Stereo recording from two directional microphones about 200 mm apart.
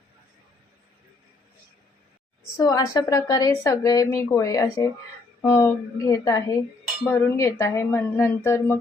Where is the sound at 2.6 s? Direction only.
20° left (ahead or behind).